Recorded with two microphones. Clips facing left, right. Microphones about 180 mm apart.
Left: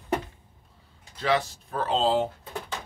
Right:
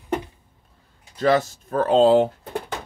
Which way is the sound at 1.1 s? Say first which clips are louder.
Right 6 dB; 45° right (ahead or behind).